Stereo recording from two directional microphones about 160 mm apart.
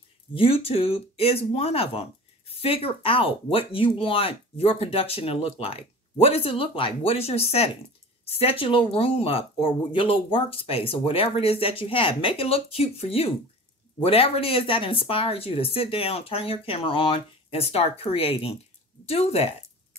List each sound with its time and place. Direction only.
0.3 s speech: 35° left (ahead or behind)